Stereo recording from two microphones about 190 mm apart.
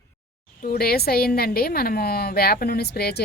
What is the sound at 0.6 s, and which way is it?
A woman's voice, 50° left (ahead or behind).